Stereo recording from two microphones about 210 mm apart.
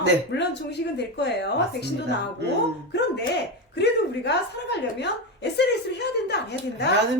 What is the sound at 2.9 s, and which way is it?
A woman's voice, 55° left (ahead or behind).